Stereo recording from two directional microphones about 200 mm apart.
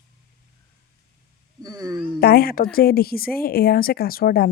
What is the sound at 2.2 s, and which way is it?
A woman's voice, 50° left (ahead or behind).